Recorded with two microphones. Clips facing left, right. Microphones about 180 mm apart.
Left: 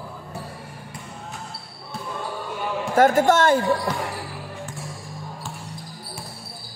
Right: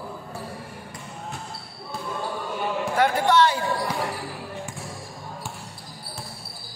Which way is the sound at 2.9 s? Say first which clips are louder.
Left 4 dB; 45° left (ahead or behind).